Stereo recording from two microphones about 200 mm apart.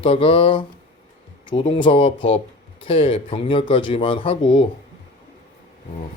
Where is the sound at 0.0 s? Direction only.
25° left (ahead or behind).